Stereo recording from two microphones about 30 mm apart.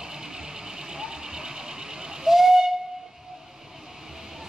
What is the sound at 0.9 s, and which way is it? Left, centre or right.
Vehicle, right.